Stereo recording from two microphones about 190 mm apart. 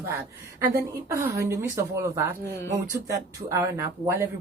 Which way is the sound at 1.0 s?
15° right (ahead or behind).